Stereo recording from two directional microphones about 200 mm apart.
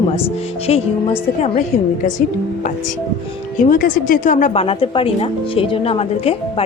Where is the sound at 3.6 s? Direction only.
45° left (ahead or behind).